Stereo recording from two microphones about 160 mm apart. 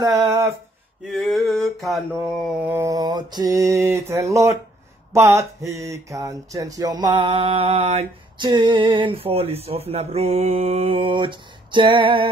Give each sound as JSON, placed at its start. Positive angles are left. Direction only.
{"t": 0.0, "sound": "a sound", "side_deg": -20}
{"t": 1.0, "sound": "mantra", "side_deg": 0}
{"t": 2.6, "sound": "speech", "side_deg": -15}
{"t": 8.5, "sound": "mantra", "side_deg": -30}